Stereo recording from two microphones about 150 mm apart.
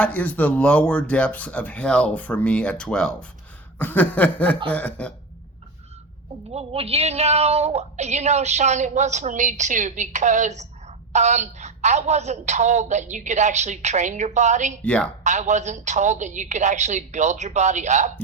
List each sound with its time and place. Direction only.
0.0 s speech: 10° left (ahead or behind)
6.5 s a woman's voice: 40° right (ahead or behind)
14.8 s speech: 10° left (ahead or behind)
15.2 s a woman's voice: 50° right (ahead or behind)